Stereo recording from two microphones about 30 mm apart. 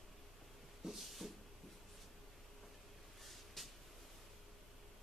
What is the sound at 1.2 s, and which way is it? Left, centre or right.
Cupboard open or close, centre.